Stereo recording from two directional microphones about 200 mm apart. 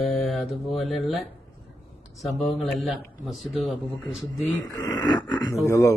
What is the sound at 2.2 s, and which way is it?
Speech, centre (ahead or behind).